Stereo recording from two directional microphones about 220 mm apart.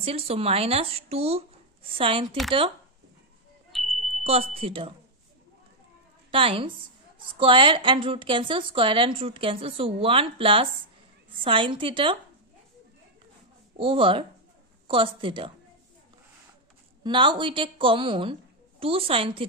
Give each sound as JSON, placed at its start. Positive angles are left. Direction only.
{"t": 0.0, "sound": "a woman's voice", "side_deg": -25}
{"t": 3.7, "sound": "smoke detector", "side_deg": 0}
{"t": 4.2, "sound": "a woman's voice", "side_deg": -25}
{"t": 6.3, "sound": "a woman's voice", "side_deg": -25}
{"t": 13.7, "sound": "a woman's voice", "side_deg": -25}
{"t": 17.0, "sound": "a woman's voice", "side_deg": -20}